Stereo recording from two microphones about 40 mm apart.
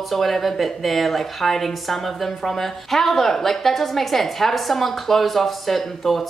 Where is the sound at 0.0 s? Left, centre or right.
Centre.